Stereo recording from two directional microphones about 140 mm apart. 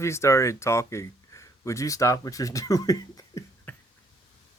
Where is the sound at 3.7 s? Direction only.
10° left (ahead or behind).